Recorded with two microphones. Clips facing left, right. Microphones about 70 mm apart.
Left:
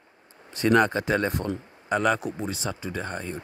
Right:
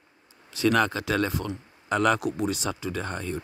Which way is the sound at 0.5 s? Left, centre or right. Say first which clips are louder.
Left 2 dB; left.